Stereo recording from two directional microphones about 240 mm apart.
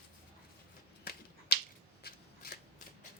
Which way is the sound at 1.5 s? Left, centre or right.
Left.